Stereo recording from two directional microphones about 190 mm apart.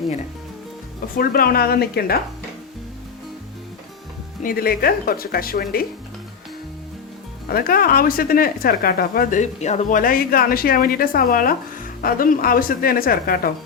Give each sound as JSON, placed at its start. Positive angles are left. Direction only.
{"t": 1.1, "sound": "a woman's voice", "side_deg": 50}
{"t": 4.4, "sound": "a woman's voice", "side_deg": 50}
{"t": 7.5, "sound": "a woman's voice", "side_deg": 50}